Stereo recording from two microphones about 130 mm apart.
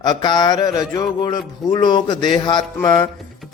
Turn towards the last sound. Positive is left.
turn(degrees=35)  # may be behind; listen again after turning